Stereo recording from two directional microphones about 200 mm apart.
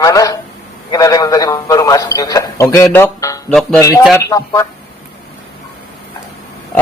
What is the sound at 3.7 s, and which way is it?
Speech, 15° left (ahead or behind).